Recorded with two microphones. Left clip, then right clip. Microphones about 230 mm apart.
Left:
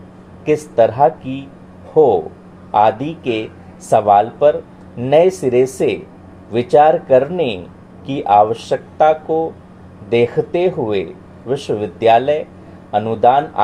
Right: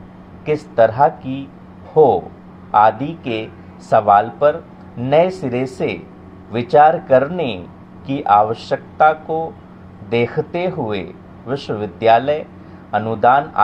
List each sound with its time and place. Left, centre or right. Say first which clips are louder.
0.4 s speech: left 1 dB; right